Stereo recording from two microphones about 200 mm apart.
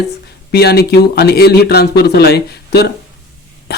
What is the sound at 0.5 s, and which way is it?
Speech, 55° left (ahead or behind).